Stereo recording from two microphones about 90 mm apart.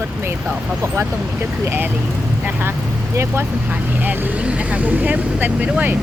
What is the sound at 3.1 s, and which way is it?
Speech, 30° right (ahead or behind).